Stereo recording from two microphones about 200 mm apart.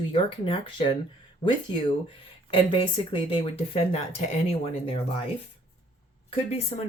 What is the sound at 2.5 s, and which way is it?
Speech, 25° left (ahead or behind).